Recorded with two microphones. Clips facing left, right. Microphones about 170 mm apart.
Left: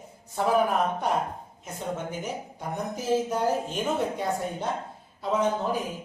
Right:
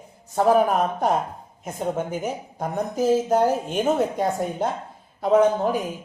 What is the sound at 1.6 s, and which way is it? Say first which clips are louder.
Speech: right 7 dB; 50° right (ahead or behind).